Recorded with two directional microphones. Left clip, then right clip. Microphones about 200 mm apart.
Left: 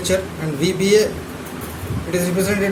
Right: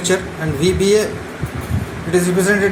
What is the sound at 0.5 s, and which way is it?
Speech, 15° right (ahead or behind).